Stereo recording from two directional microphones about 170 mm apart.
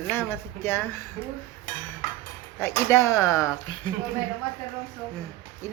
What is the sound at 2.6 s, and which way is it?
Speech, 15° left (ahead or behind).